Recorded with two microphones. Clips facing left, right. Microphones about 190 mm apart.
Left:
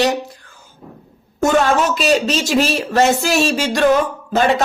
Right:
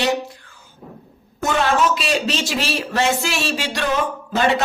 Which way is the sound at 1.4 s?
45° left (ahead or behind).